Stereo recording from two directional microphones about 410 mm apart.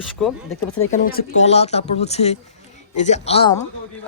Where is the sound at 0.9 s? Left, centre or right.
Centre.